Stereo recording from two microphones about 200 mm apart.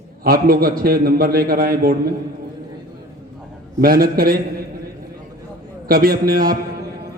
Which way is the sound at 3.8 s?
45° right (ahead or behind).